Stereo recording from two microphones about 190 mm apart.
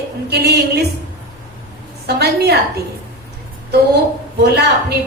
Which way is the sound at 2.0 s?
60° right (ahead or behind).